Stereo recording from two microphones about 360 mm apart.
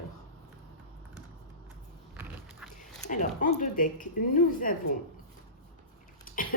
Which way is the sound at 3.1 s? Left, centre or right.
Left.